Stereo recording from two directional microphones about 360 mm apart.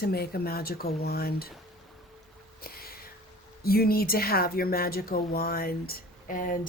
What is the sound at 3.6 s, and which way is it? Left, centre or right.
Speech, left.